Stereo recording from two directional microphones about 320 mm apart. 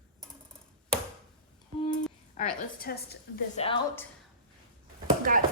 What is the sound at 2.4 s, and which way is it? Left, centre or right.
Speech, left.